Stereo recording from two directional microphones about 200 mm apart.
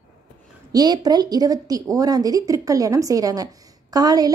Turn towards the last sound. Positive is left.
turn(degrees=-20)  # may be behind; listen again after turning